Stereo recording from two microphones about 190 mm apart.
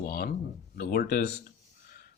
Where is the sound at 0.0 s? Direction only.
50° left (ahead or behind).